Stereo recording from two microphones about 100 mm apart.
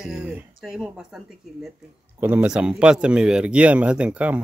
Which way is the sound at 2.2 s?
15° right (ahead or behind).